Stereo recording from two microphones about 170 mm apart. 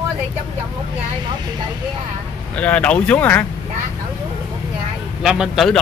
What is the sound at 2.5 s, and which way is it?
Speech, 10° left (ahead or behind).